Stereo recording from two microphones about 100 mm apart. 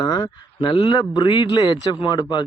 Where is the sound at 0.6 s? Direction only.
55° left (ahead or behind).